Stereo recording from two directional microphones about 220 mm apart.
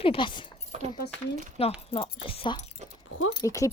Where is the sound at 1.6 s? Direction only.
25° left (ahead or behind).